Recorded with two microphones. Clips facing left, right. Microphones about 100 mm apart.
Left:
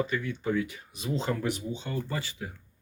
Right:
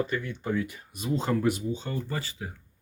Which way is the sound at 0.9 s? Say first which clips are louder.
Right 3 dB; 45° right (ahead or behind).